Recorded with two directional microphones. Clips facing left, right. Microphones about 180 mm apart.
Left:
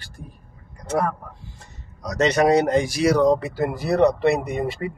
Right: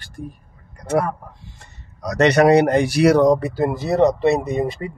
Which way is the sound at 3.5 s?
25° right (ahead or behind).